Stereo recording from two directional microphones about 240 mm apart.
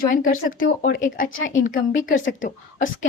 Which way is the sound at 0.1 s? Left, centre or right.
Left.